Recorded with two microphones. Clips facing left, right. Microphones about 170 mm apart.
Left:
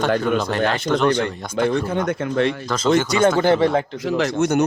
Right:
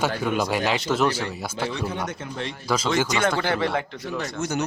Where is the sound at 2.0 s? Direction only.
65° left (ahead or behind).